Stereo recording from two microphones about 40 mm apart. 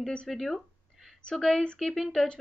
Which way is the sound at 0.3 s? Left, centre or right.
Centre.